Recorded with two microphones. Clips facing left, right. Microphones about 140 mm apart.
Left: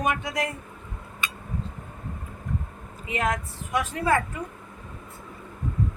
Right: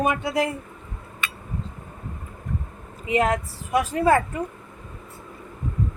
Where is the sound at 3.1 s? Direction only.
35° right (ahead or behind).